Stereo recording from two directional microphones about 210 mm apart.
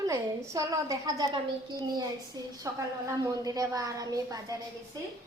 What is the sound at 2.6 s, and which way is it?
A woman's voice, 15° right (ahead or behind).